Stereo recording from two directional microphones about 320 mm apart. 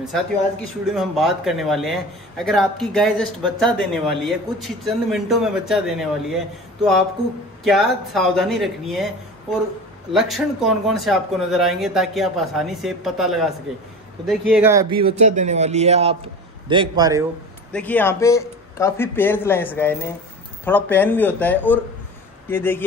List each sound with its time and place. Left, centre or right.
0.8 s a man's voice: centre
10.1 s a man's voice: centre
17.7 s a man's voice: centre